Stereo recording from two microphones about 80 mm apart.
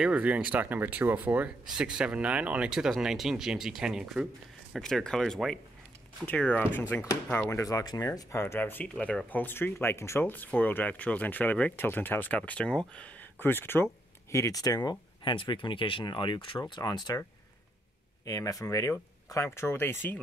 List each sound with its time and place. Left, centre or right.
0.0 s speech: centre
1.7 s speech: centre
4.7 s speech: centre; by 7.6 s left
8.0 s speech: left
8.9 s speech: centre
9.3 s speech: left
10.2 s speech: left
14.3 s speech: left
14.9 s speech: left
16.7 s speech: left
18.2 s speech: left